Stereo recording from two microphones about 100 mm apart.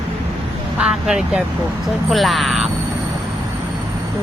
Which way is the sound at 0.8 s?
5° right (ahead or behind).